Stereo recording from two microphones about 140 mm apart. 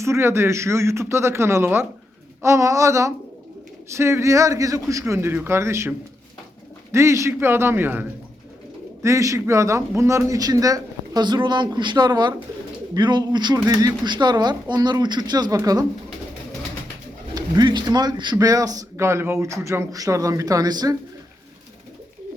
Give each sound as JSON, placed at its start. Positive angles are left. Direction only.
{"t": 0.0, "sound": "speech", "side_deg": -20}
{"t": 6.9, "sound": "a man's voice", "side_deg": -20}
{"t": 17.3, "sound": "speech", "side_deg": -30}